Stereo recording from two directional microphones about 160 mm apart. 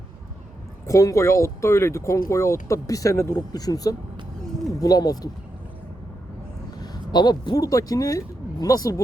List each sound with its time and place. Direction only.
0.9 s speech: 20° left (ahead or behind)
6.8 s speech: 25° left (ahead or behind)